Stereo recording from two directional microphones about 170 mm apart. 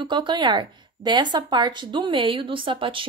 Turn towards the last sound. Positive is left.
turn(degrees=-30)  # may be behind; listen again after turning